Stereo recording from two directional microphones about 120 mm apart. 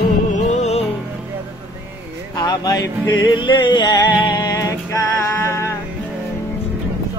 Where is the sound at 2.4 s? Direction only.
35° left (ahead or behind).